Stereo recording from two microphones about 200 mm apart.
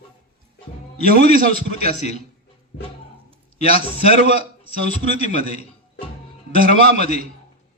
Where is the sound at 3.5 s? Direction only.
30° left (ahead or behind).